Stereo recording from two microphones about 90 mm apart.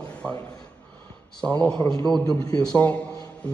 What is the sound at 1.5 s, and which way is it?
Speech, 15° left (ahead or behind).